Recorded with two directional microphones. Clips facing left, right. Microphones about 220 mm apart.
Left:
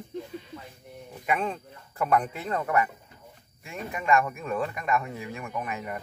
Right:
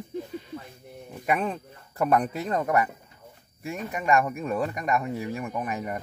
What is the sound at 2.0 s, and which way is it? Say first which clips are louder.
Speech: right 2 dB; 40° right (ahead or behind).